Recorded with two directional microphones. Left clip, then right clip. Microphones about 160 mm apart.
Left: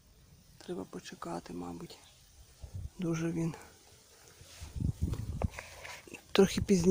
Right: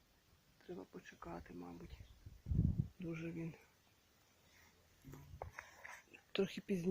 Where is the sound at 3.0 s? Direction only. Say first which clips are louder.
Left 14 dB; 25° left (ahead or behind).